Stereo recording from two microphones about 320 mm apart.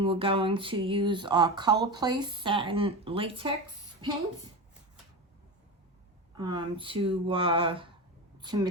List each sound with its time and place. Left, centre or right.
0.0 s speech: centre
6.3 s a woman's voice: centre